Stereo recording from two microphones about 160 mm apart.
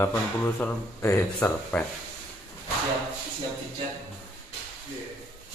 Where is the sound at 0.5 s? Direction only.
15° left (ahead or behind).